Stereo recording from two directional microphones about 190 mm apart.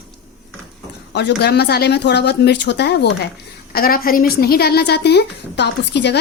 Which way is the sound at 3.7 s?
50° left (ahead or behind).